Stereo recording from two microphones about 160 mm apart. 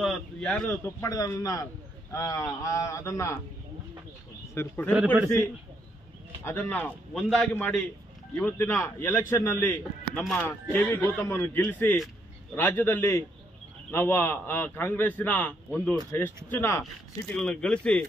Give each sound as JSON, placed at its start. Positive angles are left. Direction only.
{"t": 0.0, "sound": "speech", "side_deg": 5}
{"t": 1.0, "sound": "speech", "side_deg": 20}
{"t": 4.6, "sound": "a man's voice", "side_deg": 10}
{"t": 4.9, "sound": "a man's voice", "side_deg": -10}
{"t": 6.4, "sound": "a man's voice", "side_deg": 10}